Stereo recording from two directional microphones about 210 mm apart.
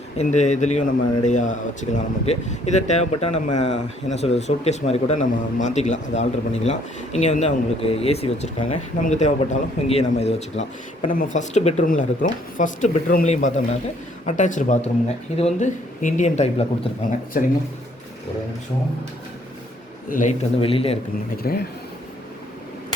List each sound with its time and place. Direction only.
0.2 s speech: 35° left (ahead or behind)
20.1 s speech: 40° left (ahead or behind)
20.6 s a man's voice: 25° left (ahead or behind)
21.4 s speech: 45° left (ahead or behind)